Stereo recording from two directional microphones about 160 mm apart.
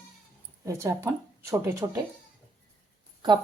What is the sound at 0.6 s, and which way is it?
Speech, 20° right (ahead or behind).